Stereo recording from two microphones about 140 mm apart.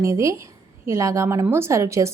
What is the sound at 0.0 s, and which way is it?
A woman's voice, 20° right (ahead or behind).